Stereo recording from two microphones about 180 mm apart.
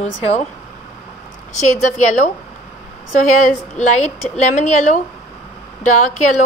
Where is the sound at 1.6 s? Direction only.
45° left (ahead or behind).